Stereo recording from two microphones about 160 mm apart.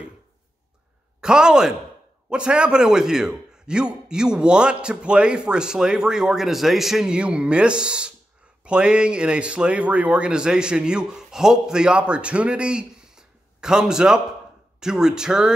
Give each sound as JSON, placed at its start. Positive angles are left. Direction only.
{"t": 1.2, "sound": "a man's voice", "side_deg": -5}